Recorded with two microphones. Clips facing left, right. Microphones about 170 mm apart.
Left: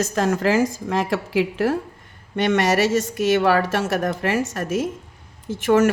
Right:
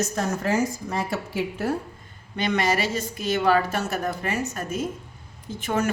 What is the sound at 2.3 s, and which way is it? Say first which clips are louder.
A woman's voice: left 5 dB; 75° left (ahead or behind).